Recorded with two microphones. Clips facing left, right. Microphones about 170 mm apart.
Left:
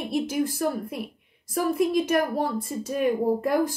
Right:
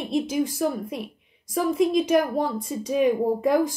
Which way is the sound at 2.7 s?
Centre (ahead or behind).